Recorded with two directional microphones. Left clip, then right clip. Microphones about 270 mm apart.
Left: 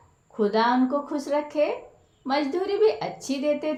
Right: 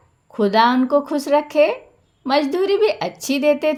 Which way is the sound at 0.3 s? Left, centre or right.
Right.